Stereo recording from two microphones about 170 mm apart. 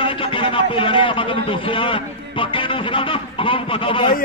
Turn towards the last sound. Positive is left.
turn(degrees=30)  # may be behind; listen again after turning